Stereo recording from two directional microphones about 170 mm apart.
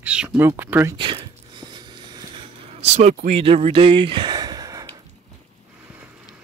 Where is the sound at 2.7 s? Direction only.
40° right (ahead or behind).